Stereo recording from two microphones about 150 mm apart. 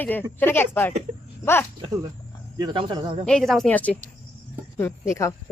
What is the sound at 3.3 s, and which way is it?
Speech, 5° left (ahead or behind).